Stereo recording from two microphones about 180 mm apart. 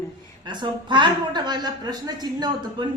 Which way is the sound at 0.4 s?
25° right (ahead or behind).